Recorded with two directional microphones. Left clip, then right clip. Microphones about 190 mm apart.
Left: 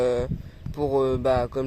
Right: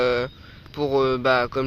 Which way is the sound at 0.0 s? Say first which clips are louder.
Right 2 dB; 5° left (ahead or behind).